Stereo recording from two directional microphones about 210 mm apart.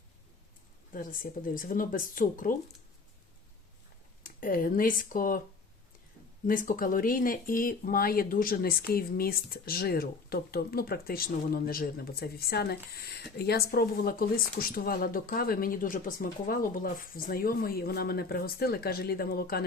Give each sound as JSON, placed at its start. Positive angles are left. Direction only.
{"t": 0.9, "sound": "speech", "side_deg": 40}
{"t": 4.2, "sound": "speech", "side_deg": 40}
{"t": 6.5, "sound": "speech", "side_deg": 40}